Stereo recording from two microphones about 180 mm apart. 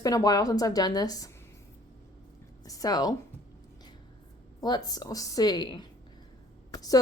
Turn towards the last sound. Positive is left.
turn(degrees=20)  # may be behind; listen again after turning